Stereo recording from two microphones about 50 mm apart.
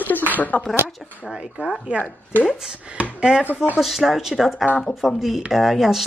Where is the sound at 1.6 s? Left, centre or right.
Right.